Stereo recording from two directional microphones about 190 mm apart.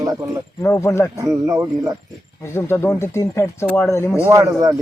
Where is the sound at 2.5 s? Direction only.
15° left (ahead or behind).